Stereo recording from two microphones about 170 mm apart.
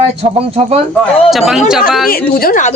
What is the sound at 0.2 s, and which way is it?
Speech, 35° right (ahead or behind).